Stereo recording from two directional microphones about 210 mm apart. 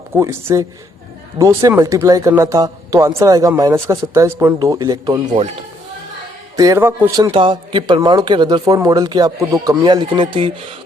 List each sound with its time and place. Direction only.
0.1 s speech: 10° right (ahead or behind)
6.6 s speech: 15° right (ahead or behind)
7.3 s speech: 25° right (ahead or behind)